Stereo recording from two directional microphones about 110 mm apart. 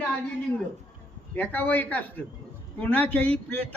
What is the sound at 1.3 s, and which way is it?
A man's voice, 15° left (ahead or behind).